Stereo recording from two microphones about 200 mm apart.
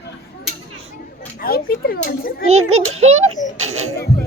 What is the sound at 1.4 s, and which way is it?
A child's voice, 50° left (ahead or behind).